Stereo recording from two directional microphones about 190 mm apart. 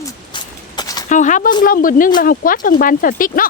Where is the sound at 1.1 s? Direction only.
40° left (ahead or behind).